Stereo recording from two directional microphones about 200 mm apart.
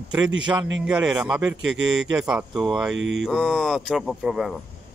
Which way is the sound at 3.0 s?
65° right (ahead or behind).